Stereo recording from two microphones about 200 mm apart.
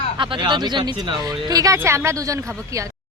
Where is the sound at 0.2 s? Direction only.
25° right (ahead or behind).